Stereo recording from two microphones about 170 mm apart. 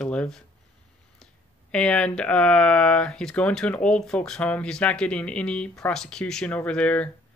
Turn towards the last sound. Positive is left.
turn(degrees=5)  # may be behind; listen again after turning